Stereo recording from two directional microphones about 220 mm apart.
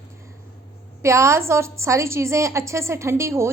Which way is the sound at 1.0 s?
15° right (ahead or behind).